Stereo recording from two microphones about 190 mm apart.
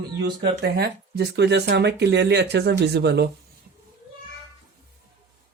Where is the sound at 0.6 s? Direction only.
55° right (ahead or behind).